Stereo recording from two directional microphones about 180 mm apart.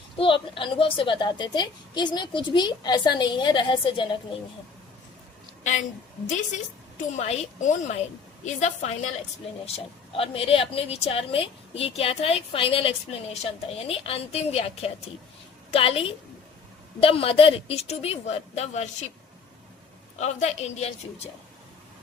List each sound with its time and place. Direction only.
0.2 s a woman's voice: 30° left (ahead or behind)
6.2 s a woman's voice: 40° left (ahead or behind)
20.1 s a woman's voice: 40° left (ahead or behind)